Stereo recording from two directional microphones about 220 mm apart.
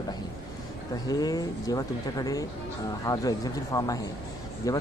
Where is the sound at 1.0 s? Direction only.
15° left (ahead or behind).